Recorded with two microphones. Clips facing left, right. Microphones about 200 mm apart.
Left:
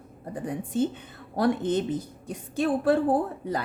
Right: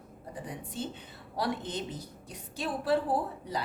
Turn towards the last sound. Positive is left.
turn(degrees=50)  # may be behind; listen again after turning